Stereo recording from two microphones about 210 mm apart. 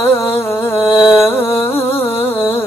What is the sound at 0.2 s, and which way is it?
Music, 10° left (ahead or behind).